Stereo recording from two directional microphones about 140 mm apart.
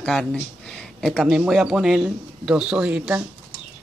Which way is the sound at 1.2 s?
5° right (ahead or behind).